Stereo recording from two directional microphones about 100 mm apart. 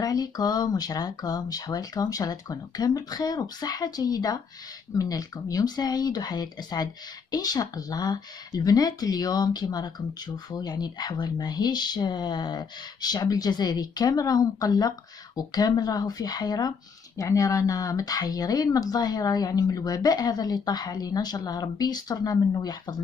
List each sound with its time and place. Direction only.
0.0 s speech: 40° left (ahead or behind)